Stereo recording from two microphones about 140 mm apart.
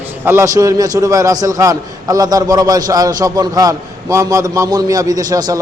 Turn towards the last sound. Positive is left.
turn(degrees=-25)  # may be behind; listen again after turning